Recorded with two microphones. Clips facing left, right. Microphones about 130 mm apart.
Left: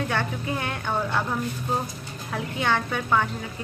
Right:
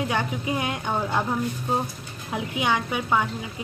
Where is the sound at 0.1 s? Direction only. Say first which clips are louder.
Right 1 dB; 15° right (ahead or behind).